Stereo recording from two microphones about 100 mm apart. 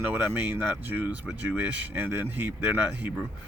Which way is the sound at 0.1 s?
20° right (ahead or behind).